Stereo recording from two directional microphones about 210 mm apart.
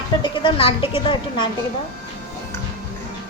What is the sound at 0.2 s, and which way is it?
A woman's voice, 25° left (ahead or behind).